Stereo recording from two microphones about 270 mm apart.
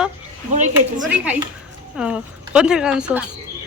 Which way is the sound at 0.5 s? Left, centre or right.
Right.